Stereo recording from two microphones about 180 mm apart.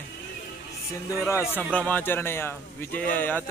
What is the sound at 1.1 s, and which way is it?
A man's voice, 15° left (ahead or behind).